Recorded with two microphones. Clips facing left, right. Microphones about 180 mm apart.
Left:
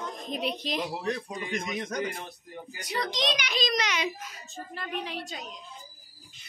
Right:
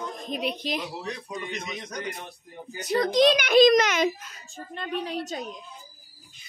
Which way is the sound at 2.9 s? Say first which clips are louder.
Right 10 dB; 50° right (ahead or behind).